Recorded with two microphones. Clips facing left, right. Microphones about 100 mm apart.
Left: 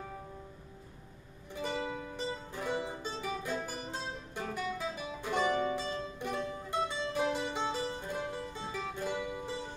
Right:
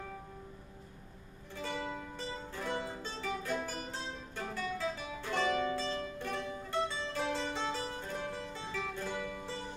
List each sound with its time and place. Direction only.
1.5 s music: 15° left (ahead or behind)